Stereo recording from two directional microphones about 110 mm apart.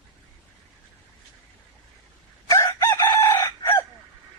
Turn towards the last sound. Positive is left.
turn(degrees=25)  # may be behind; listen again after turning